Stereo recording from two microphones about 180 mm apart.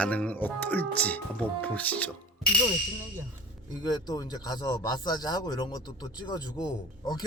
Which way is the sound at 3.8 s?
20° left (ahead or behind).